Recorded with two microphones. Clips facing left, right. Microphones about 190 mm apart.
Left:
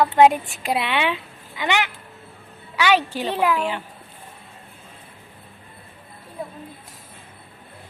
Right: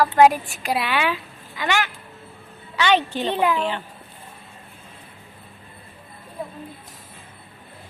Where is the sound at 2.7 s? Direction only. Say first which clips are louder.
Even; 10° left (ahead or behind).